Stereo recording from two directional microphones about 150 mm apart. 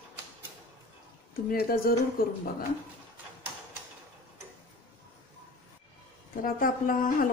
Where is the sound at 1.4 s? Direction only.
75° left (ahead or behind).